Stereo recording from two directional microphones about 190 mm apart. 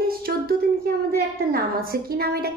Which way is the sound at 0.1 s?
55° right (ahead or behind).